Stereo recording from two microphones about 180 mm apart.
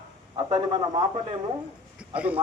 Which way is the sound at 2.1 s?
5° right (ahead or behind).